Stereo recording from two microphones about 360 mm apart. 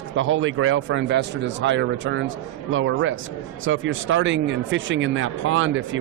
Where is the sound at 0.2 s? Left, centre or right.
Right.